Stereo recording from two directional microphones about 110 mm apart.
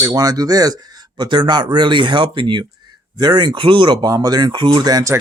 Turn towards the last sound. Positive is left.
turn(degrees=-35)  # may be behind; listen again after turning